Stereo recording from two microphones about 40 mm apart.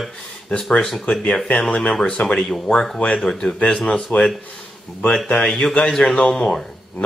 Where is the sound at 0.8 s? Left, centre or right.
Centre.